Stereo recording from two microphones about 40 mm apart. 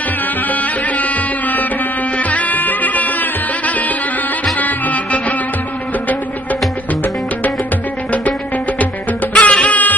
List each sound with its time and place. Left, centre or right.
0.5 s music: left
9.3 s music: left